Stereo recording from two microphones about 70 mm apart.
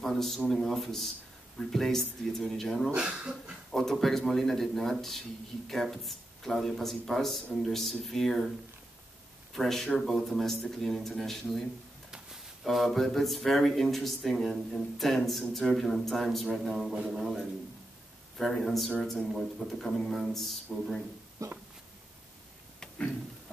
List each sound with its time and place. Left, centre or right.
0.0 s a sound: centre
0.5 s speech: centre
2.9 s speech: centre
3.7 s speech: centre
9.5 s speech: centre
12.6 s speech: centre
21.4 s a sound: right